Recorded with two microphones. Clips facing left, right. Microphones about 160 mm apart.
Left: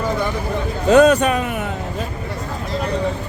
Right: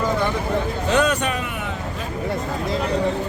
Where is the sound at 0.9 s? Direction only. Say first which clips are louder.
Left 10 dB; 45° left (ahead or behind).